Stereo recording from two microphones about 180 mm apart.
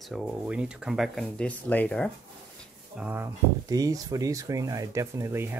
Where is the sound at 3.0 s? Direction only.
10° right (ahead or behind).